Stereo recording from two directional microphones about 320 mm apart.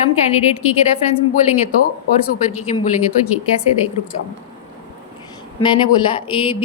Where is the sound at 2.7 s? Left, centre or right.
Left.